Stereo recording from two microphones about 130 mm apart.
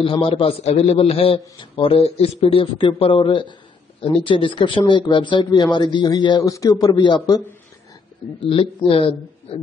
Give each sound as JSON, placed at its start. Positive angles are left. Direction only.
{"t": 0.0, "sound": "a man's voice", "side_deg": 45}
{"t": 8.4, "sound": "a man's voice", "side_deg": 45}